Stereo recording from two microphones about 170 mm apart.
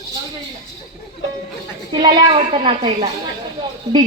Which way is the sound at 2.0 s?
25° right (ahead or behind).